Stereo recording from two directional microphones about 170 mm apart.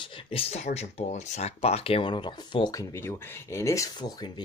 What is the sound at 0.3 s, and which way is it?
Speech, 35° left (ahead or behind).